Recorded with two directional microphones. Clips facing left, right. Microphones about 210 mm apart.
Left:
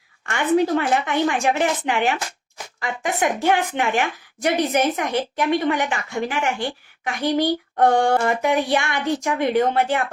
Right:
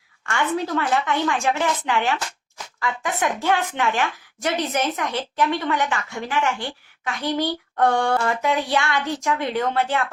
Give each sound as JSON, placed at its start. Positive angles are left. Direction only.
{"t": 0.3, "sound": "a woman's voice", "side_deg": 20}